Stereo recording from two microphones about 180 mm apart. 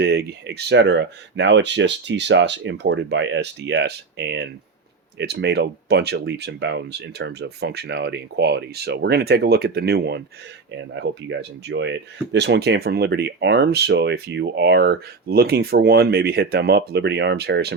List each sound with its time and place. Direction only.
0.0 s speech: 60° right (ahead or behind)
10.9 s speech: 75° right (ahead or behind)